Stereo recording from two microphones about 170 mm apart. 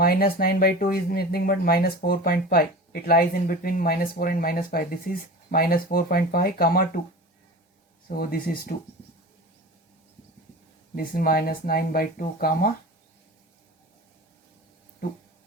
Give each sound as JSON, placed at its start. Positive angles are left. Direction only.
{"t": 0.0, "sound": "speech", "side_deg": 65}
{"t": 8.2, "sound": "speech", "side_deg": 60}
{"t": 10.9, "sound": "speech", "side_deg": 55}